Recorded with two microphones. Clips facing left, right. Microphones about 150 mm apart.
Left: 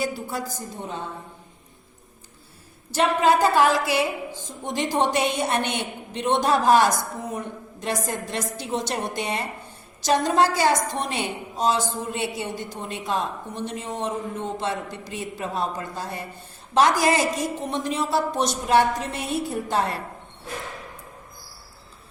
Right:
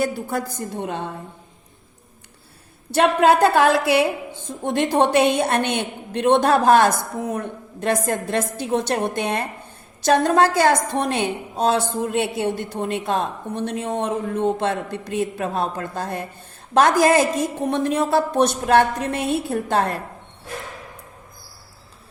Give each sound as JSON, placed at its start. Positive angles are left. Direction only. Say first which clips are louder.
{"t": 0.0, "sound": "a woman's voice", "louder": "right 5 dB", "side_deg": -55}
{"t": 2.9, "sound": "a woman's voice", "louder": "right 4 dB", "side_deg": -60}